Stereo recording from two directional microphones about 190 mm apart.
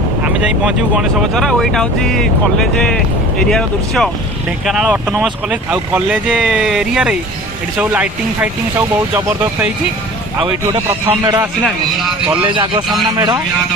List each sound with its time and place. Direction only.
0.6 s speech: centre (ahead or behind)
3.5 s speech: 5° left (ahead or behind)
12.4 s a man's voice: 25° right (ahead or behind)